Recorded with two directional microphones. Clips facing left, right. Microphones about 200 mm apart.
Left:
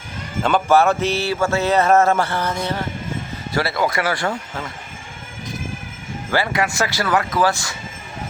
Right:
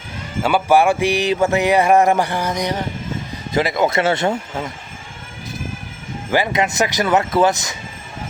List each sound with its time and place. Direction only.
0.4 s a sound: 10° right (ahead or behind)
3.5 s speech: 20° right (ahead or behind)
6.3 s speech: 20° right (ahead or behind)